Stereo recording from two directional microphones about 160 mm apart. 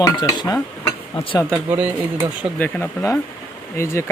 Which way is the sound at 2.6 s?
15° left (ahead or behind).